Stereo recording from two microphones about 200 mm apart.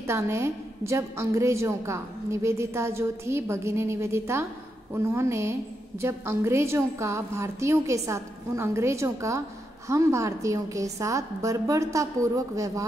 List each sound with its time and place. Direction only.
0.0 s a woman's voice: 15° right (ahead or behind)